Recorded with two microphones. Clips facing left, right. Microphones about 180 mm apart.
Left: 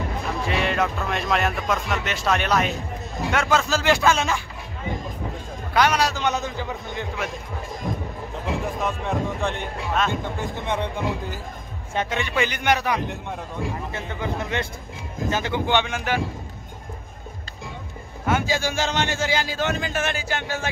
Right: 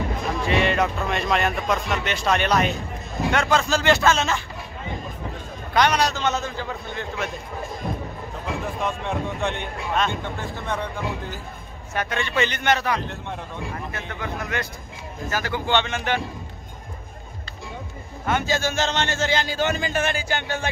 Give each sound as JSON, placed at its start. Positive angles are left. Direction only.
{"t": 0.5, "sound": "a man's voice", "side_deg": 0}
{"t": 5.7, "sound": "a man's voice", "side_deg": 5}
{"t": 8.8, "sound": "speech", "side_deg": 0}
{"t": 10.4, "sound": "a man's voice", "side_deg": 20}
{"t": 18.2, "sound": "speech", "side_deg": 10}